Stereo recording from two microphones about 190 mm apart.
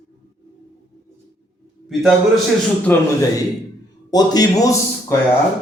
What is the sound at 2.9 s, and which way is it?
Speech, 10° left (ahead or behind).